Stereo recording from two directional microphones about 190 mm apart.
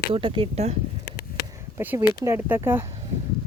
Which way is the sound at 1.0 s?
55° left (ahead or behind).